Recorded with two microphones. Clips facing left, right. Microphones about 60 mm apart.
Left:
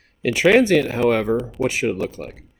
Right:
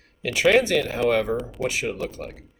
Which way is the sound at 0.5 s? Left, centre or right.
Left.